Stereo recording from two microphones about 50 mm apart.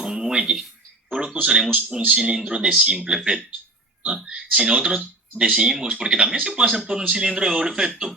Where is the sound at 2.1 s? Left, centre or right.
Centre.